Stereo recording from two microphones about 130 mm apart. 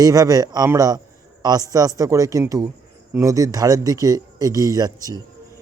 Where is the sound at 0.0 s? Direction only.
30° right (ahead or behind).